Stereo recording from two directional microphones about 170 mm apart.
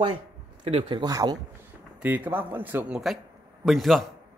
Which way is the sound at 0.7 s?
30° right (ahead or behind).